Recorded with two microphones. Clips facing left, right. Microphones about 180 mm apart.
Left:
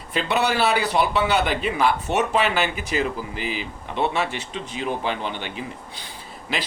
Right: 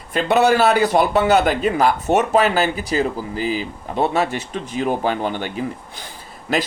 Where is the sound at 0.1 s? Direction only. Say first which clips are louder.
Right 7 dB; 45° right (ahead or behind).